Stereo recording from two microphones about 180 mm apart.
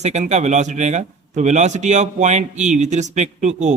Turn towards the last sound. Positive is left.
turn(degrees=-40)  # may be behind; listen again after turning